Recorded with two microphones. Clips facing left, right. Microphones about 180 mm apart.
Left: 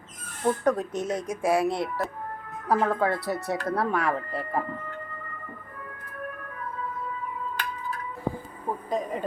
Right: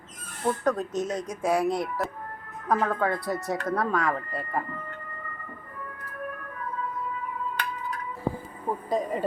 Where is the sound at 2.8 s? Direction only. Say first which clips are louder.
Left 2 dB; 10° left (ahead or behind).